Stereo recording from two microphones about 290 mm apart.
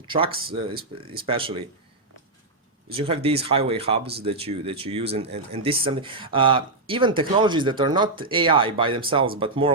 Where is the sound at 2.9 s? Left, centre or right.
Centre.